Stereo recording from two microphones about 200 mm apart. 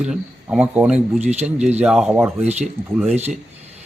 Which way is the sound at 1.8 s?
5° right (ahead or behind).